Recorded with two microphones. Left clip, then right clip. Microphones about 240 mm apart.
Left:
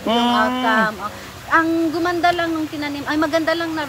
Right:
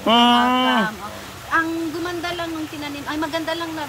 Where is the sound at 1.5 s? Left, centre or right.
Centre.